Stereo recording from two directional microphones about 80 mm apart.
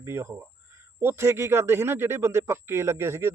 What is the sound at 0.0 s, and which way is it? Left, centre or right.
A man's voice, right.